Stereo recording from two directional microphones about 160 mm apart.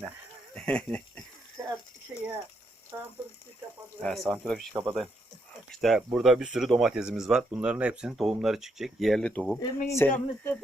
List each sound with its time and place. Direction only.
0.5 s speech: 5° left (ahead or behind)
1.6 s a sound: 20° right (ahead or behind)
4.0 s speech: centre (ahead or behind)
4.7 s speech: 15° right (ahead or behind)
5.7 s speech: centre (ahead or behind)
9.6 s speech: 20° left (ahead or behind)